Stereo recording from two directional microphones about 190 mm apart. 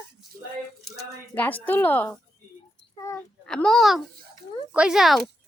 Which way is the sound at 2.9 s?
15° left (ahead or behind).